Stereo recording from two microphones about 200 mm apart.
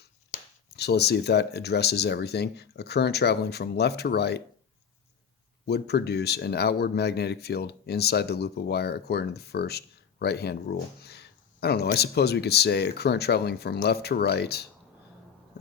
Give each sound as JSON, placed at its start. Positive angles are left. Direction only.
{"t": 0.7, "sound": "speech", "side_deg": 55}
{"t": 5.6, "sound": "speech", "side_deg": 55}